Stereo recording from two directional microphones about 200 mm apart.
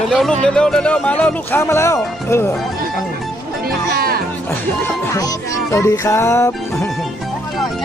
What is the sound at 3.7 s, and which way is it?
Music, 50° right (ahead or behind).